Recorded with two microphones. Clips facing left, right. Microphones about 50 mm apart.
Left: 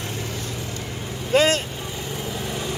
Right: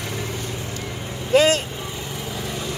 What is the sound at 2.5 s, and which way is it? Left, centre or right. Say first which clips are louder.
Vehicle: even; centre.